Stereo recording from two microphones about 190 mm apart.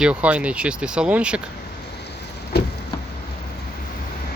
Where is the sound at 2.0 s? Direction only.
60° left (ahead or behind).